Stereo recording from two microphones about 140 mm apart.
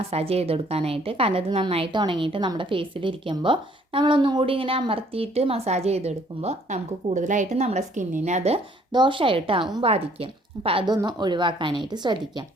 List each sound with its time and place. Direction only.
0.0 s a woman's voice: 45° right (ahead or behind)
8.9 s a woman's voice: 35° right (ahead or behind)
10.8 s speech: 30° right (ahead or behind)